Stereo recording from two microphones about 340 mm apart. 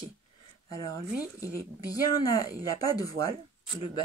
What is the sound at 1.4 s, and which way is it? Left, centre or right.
Speech, centre.